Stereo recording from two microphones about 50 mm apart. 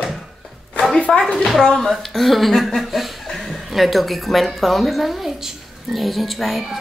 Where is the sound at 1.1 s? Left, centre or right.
Centre.